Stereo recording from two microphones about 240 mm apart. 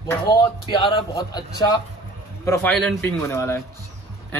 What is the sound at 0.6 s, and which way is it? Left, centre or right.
A man's voice, centre.